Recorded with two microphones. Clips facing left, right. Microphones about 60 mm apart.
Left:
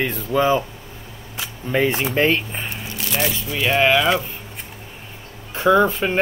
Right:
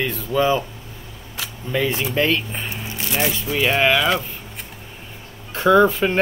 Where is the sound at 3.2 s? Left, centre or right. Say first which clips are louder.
Right 2 dB; centre.